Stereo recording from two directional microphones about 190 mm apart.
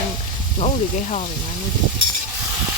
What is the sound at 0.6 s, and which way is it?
Speech, 35° left (ahead or behind).